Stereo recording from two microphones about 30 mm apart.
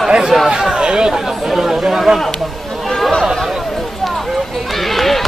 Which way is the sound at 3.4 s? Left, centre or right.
Centre.